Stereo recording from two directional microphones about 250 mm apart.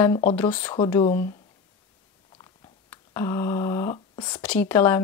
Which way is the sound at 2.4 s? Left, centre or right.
Centre.